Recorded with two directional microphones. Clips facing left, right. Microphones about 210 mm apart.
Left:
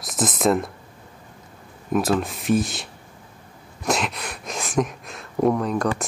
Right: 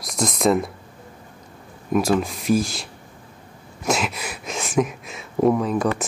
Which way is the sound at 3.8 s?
Centre (ahead or behind).